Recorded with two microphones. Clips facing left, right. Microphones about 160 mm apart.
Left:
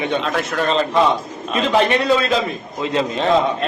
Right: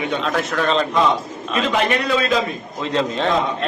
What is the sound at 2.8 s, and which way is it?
Speech, 5° left (ahead or behind).